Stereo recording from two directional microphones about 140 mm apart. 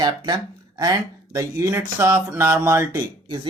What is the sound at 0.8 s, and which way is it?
Speech, 25° right (ahead or behind).